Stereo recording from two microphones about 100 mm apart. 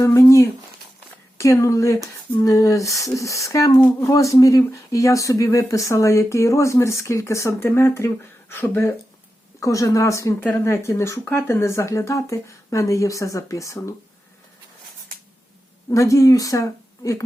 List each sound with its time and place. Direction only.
0.0 s a sound: 30° left (ahead or behind)
1.4 s speech: 30° left (ahead or behind)
15.9 s speech: 30° left (ahead or behind)